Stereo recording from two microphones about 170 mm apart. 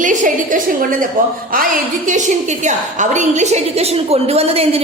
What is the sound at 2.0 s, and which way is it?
A woman's voice, 45° right (ahead or behind).